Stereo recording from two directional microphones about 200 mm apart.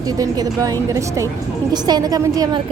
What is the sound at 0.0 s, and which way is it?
A woman's voice, 20° right (ahead or behind).